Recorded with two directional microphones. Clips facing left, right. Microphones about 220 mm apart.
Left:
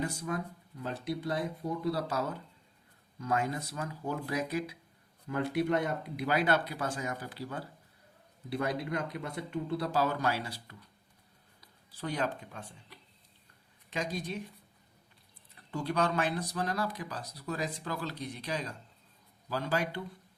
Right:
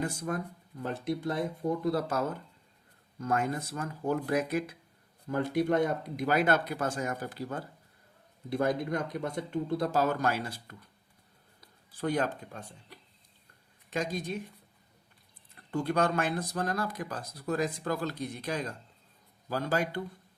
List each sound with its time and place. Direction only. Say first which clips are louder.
0.0 s speech: right 2 dB; 50° right (ahead or behind)
11.9 s speech: right 4 dB; 50° right (ahead or behind)
15.5 s speech: right 3 dB; 50° right (ahead or behind)